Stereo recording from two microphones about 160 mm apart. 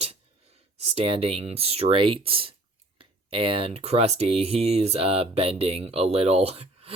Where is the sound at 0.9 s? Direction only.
40° right (ahead or behind).